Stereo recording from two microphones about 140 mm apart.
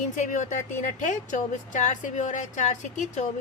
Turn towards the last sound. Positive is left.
turn(degrees=60)  # may be behind; listen again after turning